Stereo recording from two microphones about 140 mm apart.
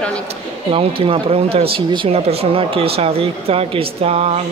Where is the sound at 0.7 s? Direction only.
40° right (ahead or behind).